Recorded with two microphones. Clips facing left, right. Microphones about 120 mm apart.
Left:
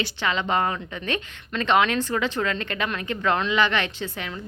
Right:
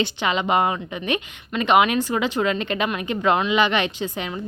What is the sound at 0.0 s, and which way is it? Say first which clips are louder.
A woman's voice: right 4 dB; 15° right (ahead or behind).